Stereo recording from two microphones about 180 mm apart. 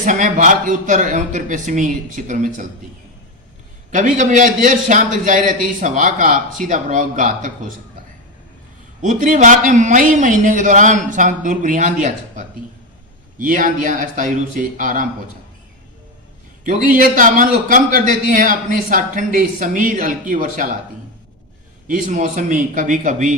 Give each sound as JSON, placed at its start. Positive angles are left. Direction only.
{"t": 0.0, "sound": "a man's voice", "side_deg": -45}
{"t": 3.9, "sound": "a man's voice", "side_deg": -45}
{"t": 9.0, "sound": "a man's voice", "side_deg": -45}
{"t": 13.4, "sound": "a man's voice", "side_deg": -50}
{"t": 16.6, "sound": "a man's voice", "side_deg": -50}
{"t": 21.8, "sound": "a man's voice", "side_deg": -45}